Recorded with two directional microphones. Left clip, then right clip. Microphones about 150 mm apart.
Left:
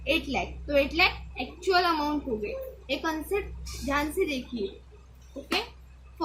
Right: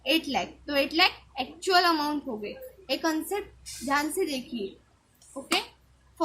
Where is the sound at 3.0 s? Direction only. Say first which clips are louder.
Right 1 dB; 55° right (ahead or behind).